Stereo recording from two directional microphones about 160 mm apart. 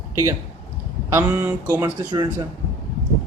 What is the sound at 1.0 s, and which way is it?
Speech, 15° right (ahead or behind).